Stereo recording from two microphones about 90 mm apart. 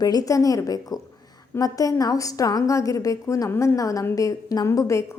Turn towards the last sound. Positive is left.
turn(degrees=35)  # may be behind; listen again after turning